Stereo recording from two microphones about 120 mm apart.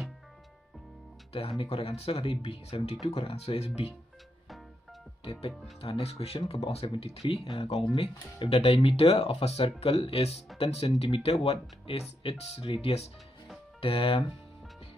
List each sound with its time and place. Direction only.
1.6 s speech: 55° left (ahead or behind)
5.2 s speech: 55° left (ahead or behind)